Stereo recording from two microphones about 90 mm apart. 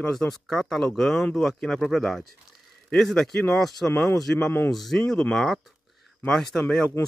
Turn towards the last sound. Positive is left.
turn(degrees=10)  # may be behind; listen again after turning